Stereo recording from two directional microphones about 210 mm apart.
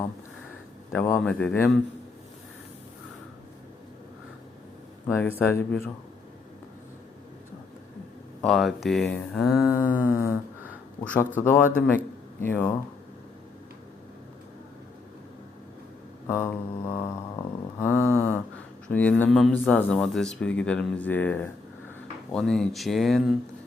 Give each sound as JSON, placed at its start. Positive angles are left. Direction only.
{"t": 0.9, "sound": "speech", "side_deg": 10}
{"t": 5.0, "sound": "speech", "side_deg": 10}
{"t": 8.4, "sound": "speech", "side_deg": 0}
{"t": 9.8, "sound": "a sound", "side_deg": -10}
{"t": 11.0, "sound": "speech", "side_deg": 5}
{"t": 16.2, "sound": "mantra", "side_deg": 10}
{"t": 18.9, "sound": "speech", "side_deg": 5}